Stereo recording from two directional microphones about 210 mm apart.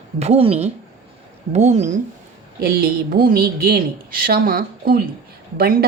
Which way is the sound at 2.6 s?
45° right (ahead or behind).